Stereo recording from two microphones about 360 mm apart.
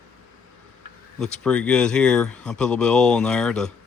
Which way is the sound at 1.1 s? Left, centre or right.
Centre.